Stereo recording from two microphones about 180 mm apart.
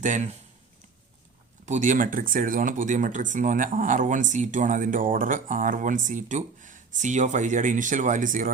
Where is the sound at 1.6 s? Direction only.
45° right (ahead or behind).